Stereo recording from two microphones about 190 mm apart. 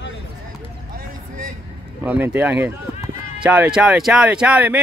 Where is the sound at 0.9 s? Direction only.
50° right (ahead or behind).